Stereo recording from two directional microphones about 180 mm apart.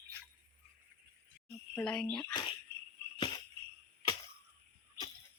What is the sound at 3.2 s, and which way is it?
Jingle bell, 25° left (ahead or behind).